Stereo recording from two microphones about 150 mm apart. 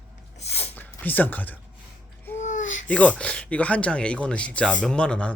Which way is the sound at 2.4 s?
55° left (ahead or behind).